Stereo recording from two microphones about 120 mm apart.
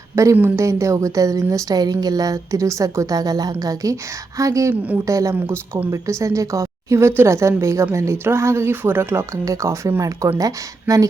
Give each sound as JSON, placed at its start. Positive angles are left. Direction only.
{"t": 0.3, "sound": "a woman's voice", "side_deg": -20}